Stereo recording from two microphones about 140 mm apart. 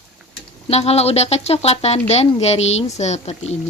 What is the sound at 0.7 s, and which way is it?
Speech, 50° left (ahead or behind).